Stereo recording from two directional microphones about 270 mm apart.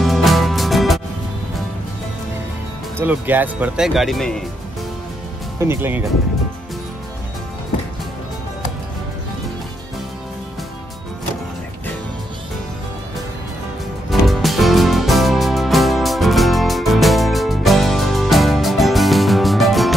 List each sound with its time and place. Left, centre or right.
0.0 s music: centre
3.0 s speech: centre
5.6 s speech: centre
14.2 s music: centre